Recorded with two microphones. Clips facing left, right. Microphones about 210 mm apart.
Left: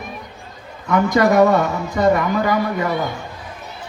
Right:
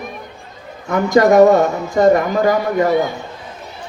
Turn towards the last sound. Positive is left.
turn(degrees=-45)  # may be behind; listen again after turning